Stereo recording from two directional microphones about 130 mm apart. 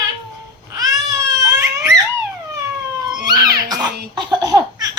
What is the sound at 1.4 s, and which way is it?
Crying, 20° right (ahead or behind).